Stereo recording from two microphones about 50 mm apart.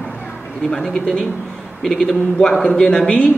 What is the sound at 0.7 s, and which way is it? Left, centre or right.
A man's voice, centre.